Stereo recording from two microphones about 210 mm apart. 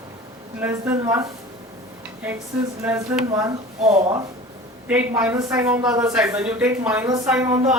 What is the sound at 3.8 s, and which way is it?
Speech, 30° right (ahead or behind).